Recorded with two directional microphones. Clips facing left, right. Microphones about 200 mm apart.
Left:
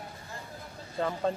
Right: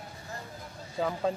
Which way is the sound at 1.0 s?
Centre (ahead or behind).